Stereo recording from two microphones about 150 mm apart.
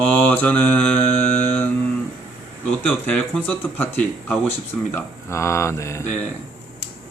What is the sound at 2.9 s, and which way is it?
Speech, 10° left (ahead or behind).